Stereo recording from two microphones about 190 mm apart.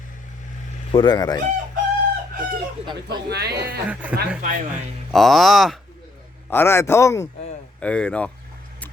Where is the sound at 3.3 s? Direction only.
60° right (ahead or behind).